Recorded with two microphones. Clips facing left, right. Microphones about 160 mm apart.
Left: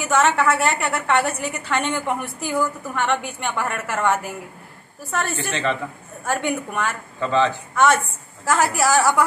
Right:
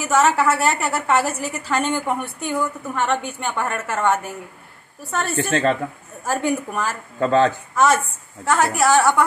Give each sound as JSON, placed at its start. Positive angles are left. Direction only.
{"t": 0.0, "sound": "a woman's voice", "side_deg": -5}
{"t": 5.5, "sound": "speech", "side_deg": -45}
{"t": 6.2, "sound": "a woman's voice", "side_deg": 0}
{"t": 7.2, "sound": "speech", "side_deg": -45}
{"t": 7.7, "sound": "a woman's voice", "side_deg": 0}